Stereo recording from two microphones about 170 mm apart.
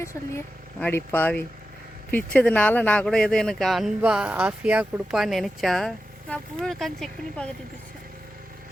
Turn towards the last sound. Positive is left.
turn(degrees=5)  # may be behind; listen again after turning